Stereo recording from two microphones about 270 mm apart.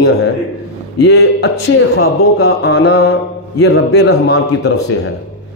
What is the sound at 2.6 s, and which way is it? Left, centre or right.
A man's voice, left.